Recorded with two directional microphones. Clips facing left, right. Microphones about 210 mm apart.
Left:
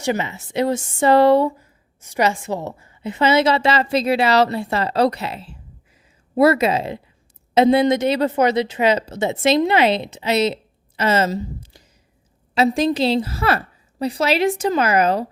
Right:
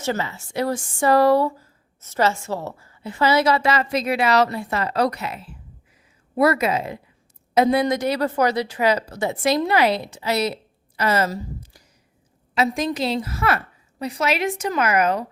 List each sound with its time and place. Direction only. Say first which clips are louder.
0.0 s a woman's voice: left 3 dB; 15° left (ahead or behind)